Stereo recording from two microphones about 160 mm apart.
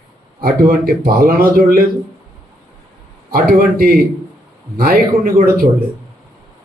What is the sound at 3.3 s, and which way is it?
A man's voice, 65° right (ahead or behind).